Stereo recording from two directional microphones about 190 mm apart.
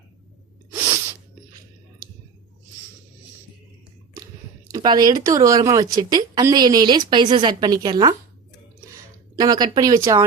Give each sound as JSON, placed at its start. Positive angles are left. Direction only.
{"t": 0.7, "sound": "sneeze", "side_deg": -15}
{"t": 4.7, "sound": "speech", "side_deg": -20}
{"t": 9.3, "sound": "speech", "side_deg": -20}